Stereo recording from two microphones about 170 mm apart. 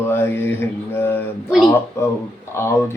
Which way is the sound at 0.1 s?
15° left (ahead or behind).